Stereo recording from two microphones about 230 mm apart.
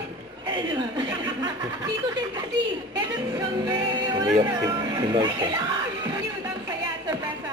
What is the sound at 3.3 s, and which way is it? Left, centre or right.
Speech, centre.